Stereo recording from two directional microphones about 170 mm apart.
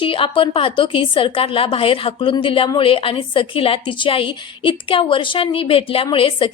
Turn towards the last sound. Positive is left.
turn(degrees=30)  # may be behind; listen again after turning